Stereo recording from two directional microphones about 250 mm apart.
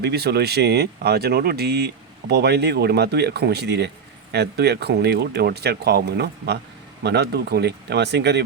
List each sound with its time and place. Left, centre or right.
0.0 s speech: right